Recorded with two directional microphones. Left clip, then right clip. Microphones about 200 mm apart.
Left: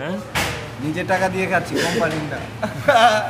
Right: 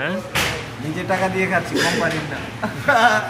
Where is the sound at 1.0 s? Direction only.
40° left (ahead or behind).